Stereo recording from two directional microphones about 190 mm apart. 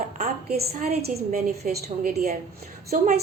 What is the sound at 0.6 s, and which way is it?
A woman's voice, 50° right (ahead or behind).